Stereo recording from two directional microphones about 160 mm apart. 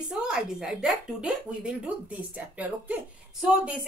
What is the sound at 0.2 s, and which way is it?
Speech, 5° right (ahead or behind).